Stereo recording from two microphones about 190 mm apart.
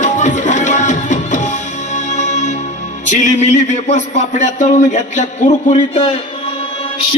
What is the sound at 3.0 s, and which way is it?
Speech, 40° left (ahead or behind).